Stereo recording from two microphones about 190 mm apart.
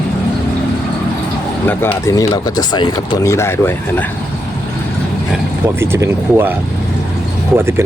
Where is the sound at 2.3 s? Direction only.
25° left (ahead or behind).